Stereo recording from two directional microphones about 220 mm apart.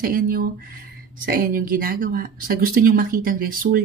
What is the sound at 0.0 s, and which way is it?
Speech, 40° right (ahead or behind).